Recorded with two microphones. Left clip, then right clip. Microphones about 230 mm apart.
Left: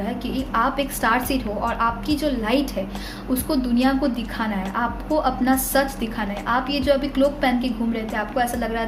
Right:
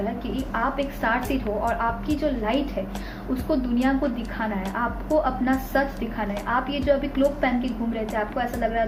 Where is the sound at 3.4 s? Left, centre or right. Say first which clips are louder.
Left 2 dB; left.